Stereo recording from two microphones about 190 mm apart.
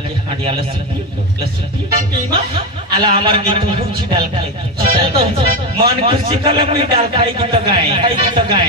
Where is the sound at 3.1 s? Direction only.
30° right (ahead or behind).